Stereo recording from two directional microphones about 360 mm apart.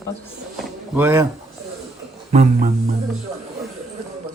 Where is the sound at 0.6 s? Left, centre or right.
Centre.